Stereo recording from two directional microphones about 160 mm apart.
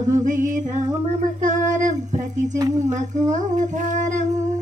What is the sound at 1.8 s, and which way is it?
A man's voice, 50° right (ahead or behind).